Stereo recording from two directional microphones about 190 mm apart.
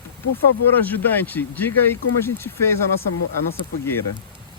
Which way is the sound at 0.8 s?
10° left (ahead or behind).